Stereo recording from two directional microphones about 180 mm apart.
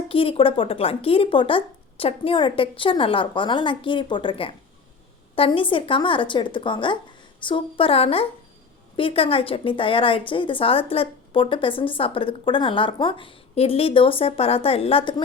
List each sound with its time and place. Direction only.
0.1 s a woman's voice: 30° left (ahead or behind)